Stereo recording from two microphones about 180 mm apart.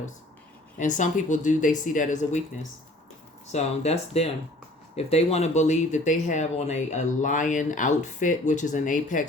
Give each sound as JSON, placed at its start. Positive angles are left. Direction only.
{"t": 0.8, "sound": "speech", "side_deg": 45}
{"t": 3.5, "sound": "speech", "side_deg": 35}